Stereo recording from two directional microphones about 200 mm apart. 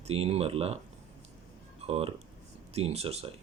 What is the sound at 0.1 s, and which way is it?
Speech, 30° right (ahead or behind).